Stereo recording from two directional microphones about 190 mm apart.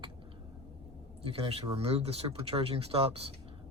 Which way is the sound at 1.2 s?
30° right (ahead or behind).